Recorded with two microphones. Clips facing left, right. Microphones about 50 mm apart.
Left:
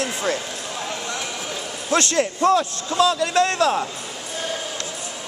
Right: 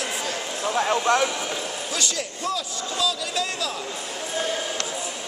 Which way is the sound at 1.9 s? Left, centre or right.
Left.